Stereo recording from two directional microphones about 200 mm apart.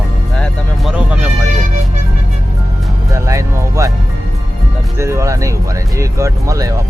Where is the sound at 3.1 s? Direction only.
15° right (ahead or behind).